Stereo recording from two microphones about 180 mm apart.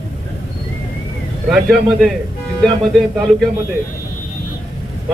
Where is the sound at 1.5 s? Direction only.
Centre (ahead or behind).